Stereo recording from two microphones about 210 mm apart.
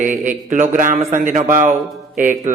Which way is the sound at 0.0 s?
35° right (ahead or behind).